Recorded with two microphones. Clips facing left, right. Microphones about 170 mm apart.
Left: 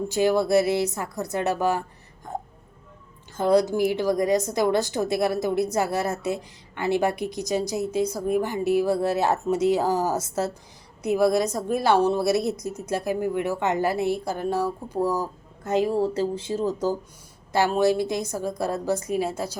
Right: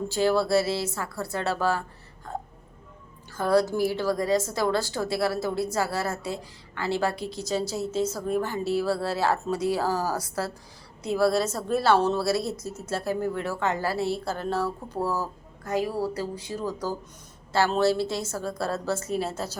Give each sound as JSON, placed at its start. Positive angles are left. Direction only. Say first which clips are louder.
{"t": 0.1, "sound": "a woman's voice", "louder": "left 2 dB", "side_deg": 15}
{"t": 2.3, "sound": "a sound", "louder": "left 2 dB", "side_deg": 20}
{"t": 3.3, "sound": "a woman's voice", "louder": "left 3 dB", "side_deg": 20}